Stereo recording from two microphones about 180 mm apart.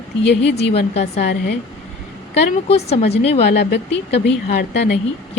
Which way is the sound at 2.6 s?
35° left (ahead or behind).